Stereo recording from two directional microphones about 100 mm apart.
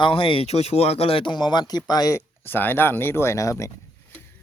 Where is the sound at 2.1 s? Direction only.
20° left (ahead or behind).